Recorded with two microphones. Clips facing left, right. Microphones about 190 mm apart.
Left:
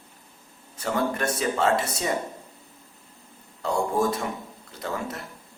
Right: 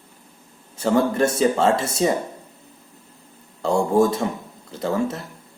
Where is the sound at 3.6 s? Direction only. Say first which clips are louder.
Right 7 dB; 25° right (ahead or behind).